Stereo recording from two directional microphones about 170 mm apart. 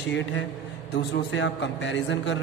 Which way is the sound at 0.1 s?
90° left.